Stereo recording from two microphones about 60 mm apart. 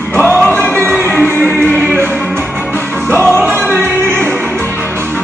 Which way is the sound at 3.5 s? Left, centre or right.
Right.